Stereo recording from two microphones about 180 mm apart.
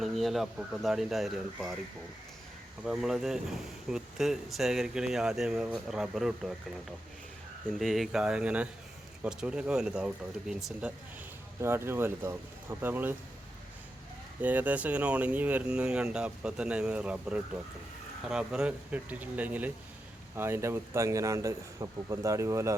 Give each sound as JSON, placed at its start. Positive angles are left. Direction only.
{"t": 0.0, "sound": "speech", "side_deg": 0}
{"t": 2.8, "sound": "speech", "side_deg": 0}
{"t": 7.7, "sound": "speech", "side_deg": 0}
{"t": 14.4, "sound": "speech", "side_deg": -10}